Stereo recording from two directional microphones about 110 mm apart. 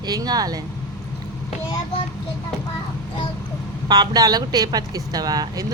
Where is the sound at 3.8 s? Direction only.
40° right (ahead or behind).